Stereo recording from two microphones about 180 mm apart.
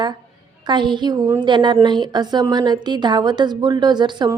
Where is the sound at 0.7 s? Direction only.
25° right (ahead or behind).